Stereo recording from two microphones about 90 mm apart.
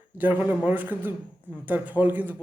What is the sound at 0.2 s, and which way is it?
A man's voice, 20° right (ahead or behind).